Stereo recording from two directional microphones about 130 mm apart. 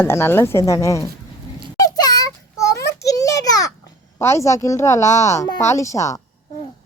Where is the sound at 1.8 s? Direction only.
30° left (ahead or behind).